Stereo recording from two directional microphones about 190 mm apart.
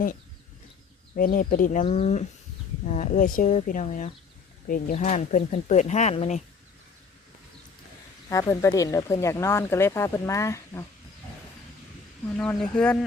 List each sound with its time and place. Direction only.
1.1 s speech: 50° left (ahead or behind)
8.3 s speech: 15° left (ahead or behind)
12.4 s speech: 5° left (ahead or behind)